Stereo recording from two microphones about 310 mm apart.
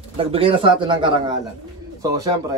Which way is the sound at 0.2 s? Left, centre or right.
Centre.